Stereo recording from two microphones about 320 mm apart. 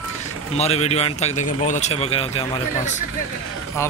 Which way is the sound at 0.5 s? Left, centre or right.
Centre.